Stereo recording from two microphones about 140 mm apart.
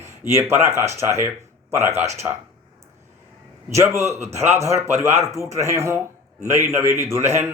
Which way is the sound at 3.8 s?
20° right (ahead or behind).